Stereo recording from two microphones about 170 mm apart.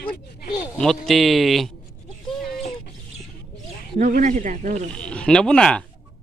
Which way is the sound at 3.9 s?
50° right (ahead or behind).